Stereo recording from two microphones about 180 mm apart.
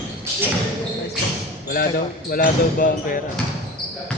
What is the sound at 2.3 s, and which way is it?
Speech, 50° left (ahead or behind).